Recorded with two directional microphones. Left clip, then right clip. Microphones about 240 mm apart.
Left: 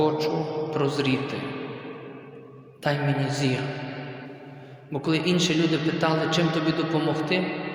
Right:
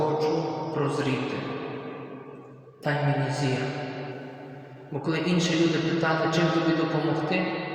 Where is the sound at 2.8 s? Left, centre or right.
Left.